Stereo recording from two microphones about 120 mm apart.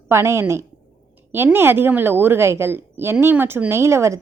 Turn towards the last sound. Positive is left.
turn(degrees=-25)  # may be behind; listen again after turning